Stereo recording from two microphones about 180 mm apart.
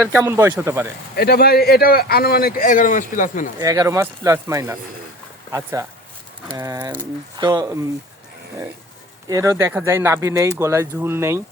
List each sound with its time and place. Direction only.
0.1 s speech: 15° right (ahead or behind)
1.1 s speech: 60° left (ahead or behind)
3.6 s speech: 15° right (ahead or behind)
9.3 s speech: 15° right (ahead or behind)